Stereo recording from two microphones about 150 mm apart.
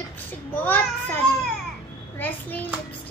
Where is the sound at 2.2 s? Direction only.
10° left (ahead or behind).